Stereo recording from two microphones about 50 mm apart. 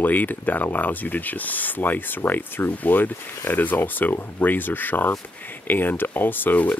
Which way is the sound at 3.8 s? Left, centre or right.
Left.